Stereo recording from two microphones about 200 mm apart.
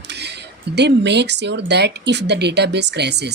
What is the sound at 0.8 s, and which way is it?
Speech, 60° right (ahead or behind).